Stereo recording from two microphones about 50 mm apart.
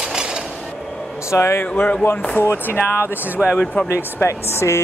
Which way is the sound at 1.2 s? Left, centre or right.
Left.